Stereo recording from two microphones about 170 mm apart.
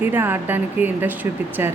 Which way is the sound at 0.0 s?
10° right (ahead or behind).